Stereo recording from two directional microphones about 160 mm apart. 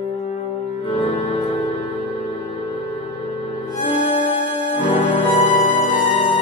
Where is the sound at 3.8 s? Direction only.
45° left (ahead or behind).